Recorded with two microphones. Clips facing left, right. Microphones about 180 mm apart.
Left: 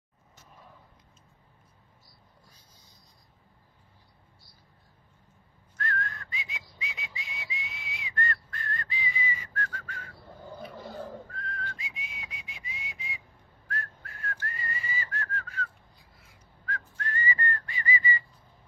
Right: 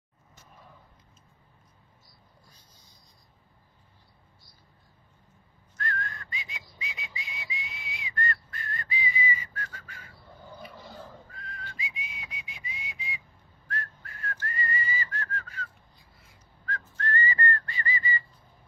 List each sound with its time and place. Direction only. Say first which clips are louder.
5.8 s whistling: left 1 dB; centre (ahead or behind)
10.7 s a sound: left 5 dB; 50° left (ahead or behind)
11.3 s whistling: left 4 dB; centre (ahead or behind)
16.6 s whistling: right 3 dB; 10° left (ahead or behind)